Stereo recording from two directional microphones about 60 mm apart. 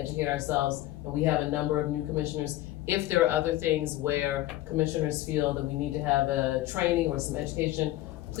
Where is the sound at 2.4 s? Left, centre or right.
Right.